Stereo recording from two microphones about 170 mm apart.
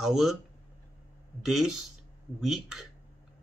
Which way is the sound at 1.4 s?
Centre (ahead or behind).